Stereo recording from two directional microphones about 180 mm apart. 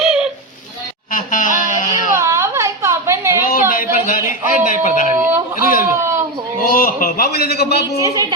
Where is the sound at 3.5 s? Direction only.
55° left (ahead or behind).